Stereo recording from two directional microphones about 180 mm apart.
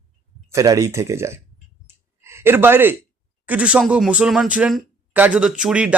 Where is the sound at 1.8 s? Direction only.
15° right (ahead or behind).